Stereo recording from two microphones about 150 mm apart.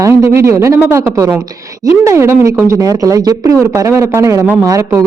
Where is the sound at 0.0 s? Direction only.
20° right (ahead or behind).